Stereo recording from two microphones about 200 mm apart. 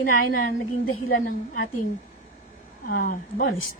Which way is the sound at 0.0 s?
45° left (ahead or behind).